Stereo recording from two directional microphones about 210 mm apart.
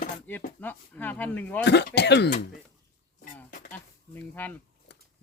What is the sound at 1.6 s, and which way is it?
Speech, 55° left (ahead or behind).